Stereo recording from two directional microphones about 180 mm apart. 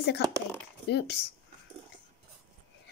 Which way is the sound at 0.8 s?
65° left (ahead or behind).